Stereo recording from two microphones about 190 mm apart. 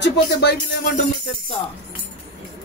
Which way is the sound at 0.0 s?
60° left (ahead or behind).